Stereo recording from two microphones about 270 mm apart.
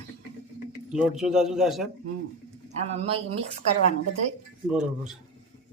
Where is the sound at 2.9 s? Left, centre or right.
Right.